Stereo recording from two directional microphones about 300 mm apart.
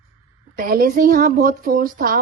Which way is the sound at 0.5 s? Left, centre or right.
Right.